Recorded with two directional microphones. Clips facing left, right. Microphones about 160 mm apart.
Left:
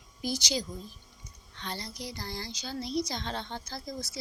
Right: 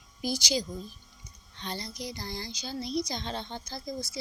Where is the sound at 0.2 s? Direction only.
10° right (ahead or behind).